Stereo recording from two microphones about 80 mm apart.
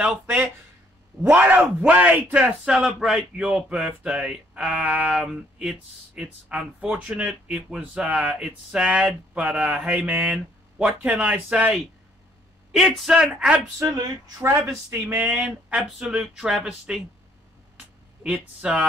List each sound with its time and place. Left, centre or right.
1.3 s speech: centre
2.6 s speech: centre
12.9 s speech: centre
13.7 s a sound: right
15.2 s speech: centre
17.7 s a sound: centre